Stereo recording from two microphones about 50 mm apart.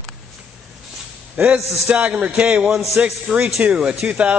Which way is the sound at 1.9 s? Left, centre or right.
Right.